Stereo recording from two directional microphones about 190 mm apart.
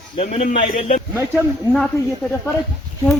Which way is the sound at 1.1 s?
10° right (ahead or behind).